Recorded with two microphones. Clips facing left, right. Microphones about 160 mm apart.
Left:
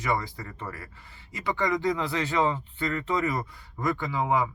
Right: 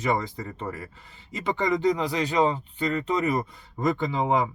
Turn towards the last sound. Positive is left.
turn(degrees=-25)  # may be behind; listen again after turning